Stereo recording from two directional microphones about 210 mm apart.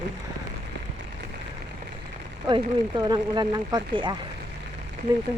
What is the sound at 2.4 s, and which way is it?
Speech, 20° right (ahead or behind).